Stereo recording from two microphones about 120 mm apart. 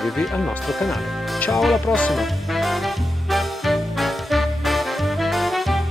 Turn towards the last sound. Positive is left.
turn(degrees=0)  # may be behind; listen again after turning